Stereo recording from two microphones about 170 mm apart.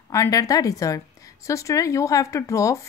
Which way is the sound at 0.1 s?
20° left (ahead or behind).